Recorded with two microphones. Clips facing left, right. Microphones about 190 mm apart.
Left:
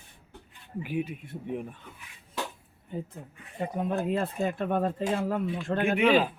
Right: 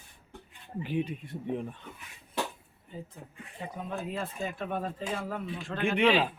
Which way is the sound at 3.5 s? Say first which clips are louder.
Left 8 dB; 60° left (ahead or behind).